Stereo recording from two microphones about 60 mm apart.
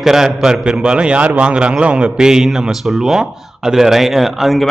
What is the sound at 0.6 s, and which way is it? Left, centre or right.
A man's voice, centre.